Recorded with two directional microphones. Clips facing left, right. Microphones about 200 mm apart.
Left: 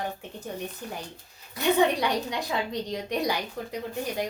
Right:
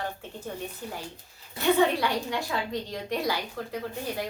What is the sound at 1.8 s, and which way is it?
A woman's voice, 15° left (ahead or behind).